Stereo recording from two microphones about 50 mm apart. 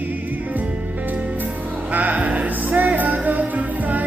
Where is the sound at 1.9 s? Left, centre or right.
Right.